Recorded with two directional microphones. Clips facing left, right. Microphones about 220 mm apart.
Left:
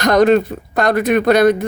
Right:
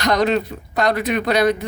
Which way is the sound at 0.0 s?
50° left (ahead or behind).